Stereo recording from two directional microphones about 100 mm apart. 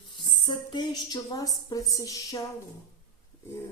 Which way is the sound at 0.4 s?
50° left (ahead or behind).